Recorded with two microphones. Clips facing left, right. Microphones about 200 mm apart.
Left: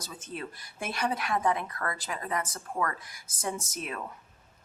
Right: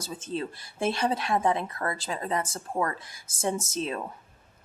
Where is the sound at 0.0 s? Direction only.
25° right (ahead or behind).